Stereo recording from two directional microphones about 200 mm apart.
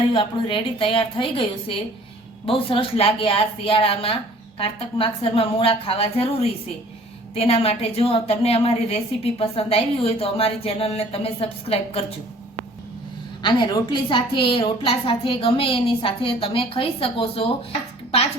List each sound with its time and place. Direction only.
0.1 s a woman's voice: 25° left (ahead or behind)
13.4 s a woman's voice: 20° left (ahead or behind)